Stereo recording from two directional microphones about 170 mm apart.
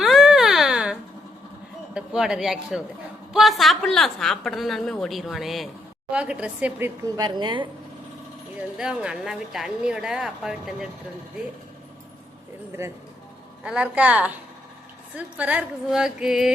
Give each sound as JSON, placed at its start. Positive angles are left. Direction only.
{"t": 0.0, "sound": "a sound", "side_deg": 0}
{"t": 1.9, "sound": "a man's voice", "side_deg": -5}
{"t": 7.3, "sound": "speech", "side_deg": -25}
{"t": 8.8, "sound": "a woman's voice", "side_deg": -5}
{"t": 12.8, "sound": "a woman's voice", "side_deg": -15}